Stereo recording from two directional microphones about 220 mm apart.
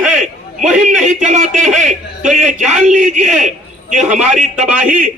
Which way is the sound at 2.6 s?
Centre (ahead or behind).